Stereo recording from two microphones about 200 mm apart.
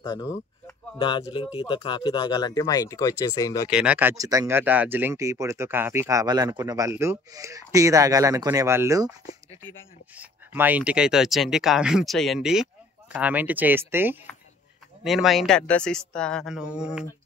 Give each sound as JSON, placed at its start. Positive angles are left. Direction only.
{"t": 0.0, "sound": "speech", "side_deg": 20}
{"t": 3.7, "sound": "speech", "side_deg": -5}